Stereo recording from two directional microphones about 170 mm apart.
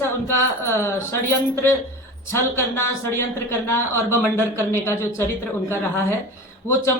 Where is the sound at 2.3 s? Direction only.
15° left (ahead or behind).